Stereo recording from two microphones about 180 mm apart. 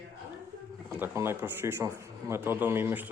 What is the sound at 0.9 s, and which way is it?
Speech, 10° right (ahead or behind).